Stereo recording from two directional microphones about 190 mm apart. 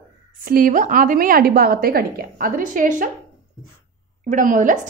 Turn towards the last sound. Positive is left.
turn(degrees=-45)  # may be behind; listen again after turning